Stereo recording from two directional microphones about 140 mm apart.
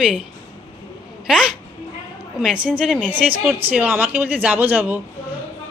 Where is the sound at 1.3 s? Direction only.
5° right (ahead or behind).